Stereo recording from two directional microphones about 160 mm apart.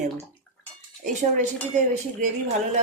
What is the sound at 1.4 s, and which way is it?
Speech, 50° right (ahead or behind).